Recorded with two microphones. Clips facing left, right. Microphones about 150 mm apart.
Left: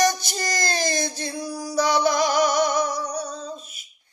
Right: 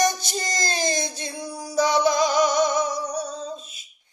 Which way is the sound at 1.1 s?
20° right (ahead or behind).